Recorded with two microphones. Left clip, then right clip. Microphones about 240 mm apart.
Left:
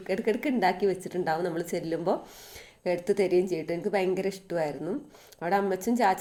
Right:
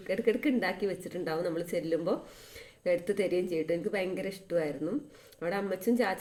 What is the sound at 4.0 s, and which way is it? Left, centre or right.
Speech, left.